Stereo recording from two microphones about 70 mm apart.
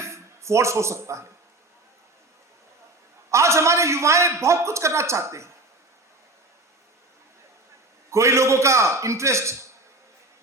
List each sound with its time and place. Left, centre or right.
0.0 s speech: right
3.2 s a man's voice: right
8.1 s a man's voice: right